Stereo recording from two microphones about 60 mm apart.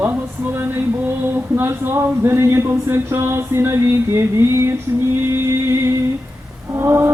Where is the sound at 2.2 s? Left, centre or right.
Right.